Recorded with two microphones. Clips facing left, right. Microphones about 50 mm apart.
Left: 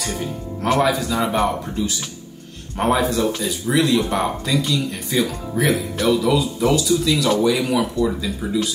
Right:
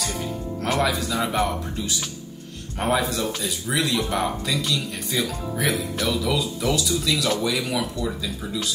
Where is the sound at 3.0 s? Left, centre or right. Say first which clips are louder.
Left 5 dB; left.